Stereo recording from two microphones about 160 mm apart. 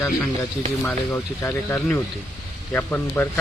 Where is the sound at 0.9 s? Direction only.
15° left (ahead or behind).